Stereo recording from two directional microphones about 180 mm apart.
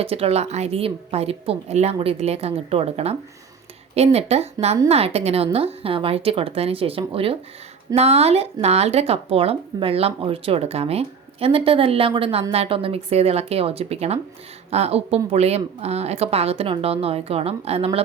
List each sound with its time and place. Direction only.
0.0 s speech: 35° right (ahead or behind)